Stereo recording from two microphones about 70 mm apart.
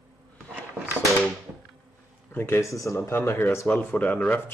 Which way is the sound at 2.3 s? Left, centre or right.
Left.